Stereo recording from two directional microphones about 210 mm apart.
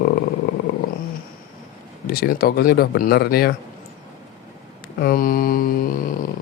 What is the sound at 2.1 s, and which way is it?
Speech, 45° left (ahead or behind).